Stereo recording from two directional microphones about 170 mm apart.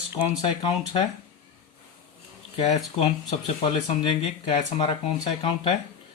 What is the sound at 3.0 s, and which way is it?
Speech, 35° left (ahead or behind).